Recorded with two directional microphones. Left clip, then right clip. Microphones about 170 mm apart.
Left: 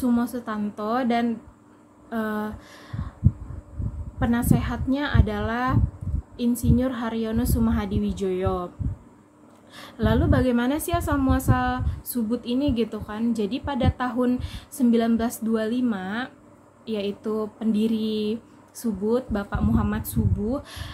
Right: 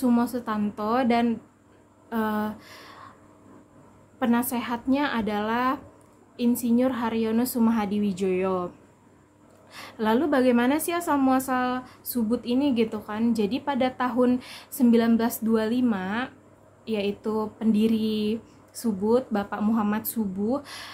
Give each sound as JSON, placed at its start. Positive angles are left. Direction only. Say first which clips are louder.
{"t": 0.0, "sound": "a woman's voice", "louder": "right 1 dB", "side_deg": -15}
{"t": 4.2, "sound": "a woman's voice", "louder": "left 1 dB", "side_deg": -15}
{"t": 9.8, "sound": "a woman's voice", "louder": "right 1 dB", "side_deg": -10}